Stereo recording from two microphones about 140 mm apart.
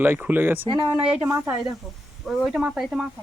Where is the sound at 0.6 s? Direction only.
35° right (ahead or behind).